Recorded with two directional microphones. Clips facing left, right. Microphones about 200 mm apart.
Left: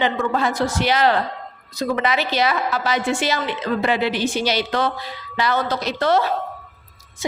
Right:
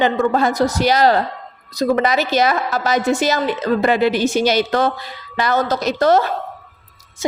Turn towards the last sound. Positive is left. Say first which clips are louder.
# right 4 dB
turn(degrees=-45)  # may be behind; listen again after turning